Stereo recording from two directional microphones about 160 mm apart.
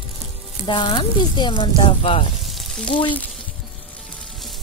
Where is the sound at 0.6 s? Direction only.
30° left (ahead or behind).